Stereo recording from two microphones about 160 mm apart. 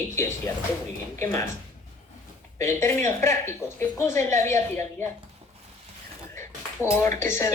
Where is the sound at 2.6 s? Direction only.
15° left (ahead or behind).